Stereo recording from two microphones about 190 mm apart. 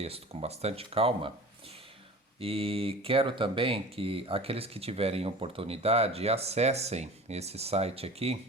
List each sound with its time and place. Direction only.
0.0 s speech: 30° right (ahead or behind)
2.4 s speech: 30° right (ahead or behind)